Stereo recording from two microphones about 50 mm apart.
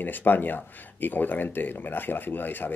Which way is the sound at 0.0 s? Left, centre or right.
Left.